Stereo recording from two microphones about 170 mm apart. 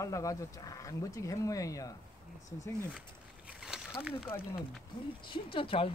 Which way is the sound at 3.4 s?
5° right (ahead or behind).